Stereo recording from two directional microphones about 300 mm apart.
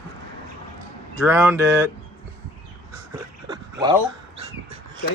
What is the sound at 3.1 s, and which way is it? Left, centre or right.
Dog, centre.